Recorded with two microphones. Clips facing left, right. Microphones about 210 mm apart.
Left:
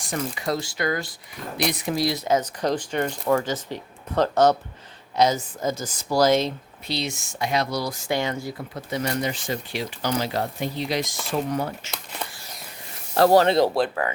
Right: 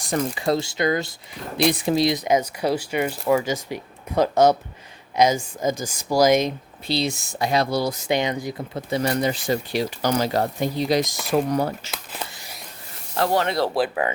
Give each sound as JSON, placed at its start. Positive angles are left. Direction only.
{"t": 0.1, "sound": "speech", "side_deg": -30}
{"t": 6.8, "sound": "speech", "side_deg": -35}
{"t": 13.1, "sound": "speech", "side_deg": 35}